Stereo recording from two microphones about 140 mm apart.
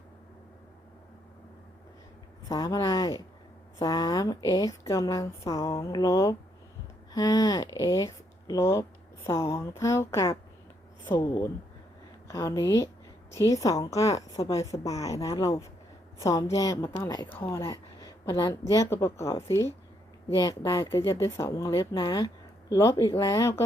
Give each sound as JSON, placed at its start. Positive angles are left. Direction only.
{"t": 2.5, "sound": "a woman's voice", "side_deg": 25}
{"t": 22.7, "sound": "a woman's voice", "side_deg": 20}